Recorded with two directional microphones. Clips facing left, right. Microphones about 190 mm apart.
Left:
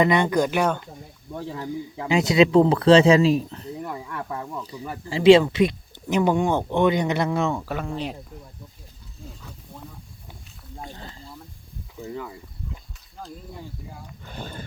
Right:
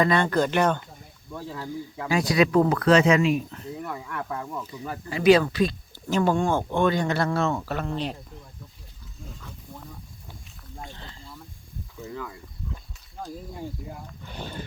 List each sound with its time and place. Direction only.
0.0 s speech: 20° left (ahead or behind)
1.3 s speech: 20° left (ahead or behind)
10.8 s snake: 40° left (ahead or behind)